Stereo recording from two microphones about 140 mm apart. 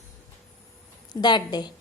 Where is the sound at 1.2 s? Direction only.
30° left (ahead or behind).